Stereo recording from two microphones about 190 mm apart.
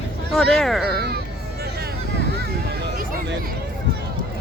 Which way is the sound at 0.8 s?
60° right (ahead or behind).